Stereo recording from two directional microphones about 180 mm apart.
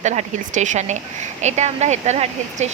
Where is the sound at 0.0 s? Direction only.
40° right (ahead or behind).